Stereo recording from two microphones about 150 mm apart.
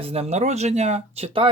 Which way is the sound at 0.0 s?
45° right (ahead or behind).